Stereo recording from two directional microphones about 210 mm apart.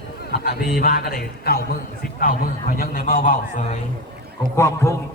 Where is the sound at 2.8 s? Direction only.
45° left (ahead or behind).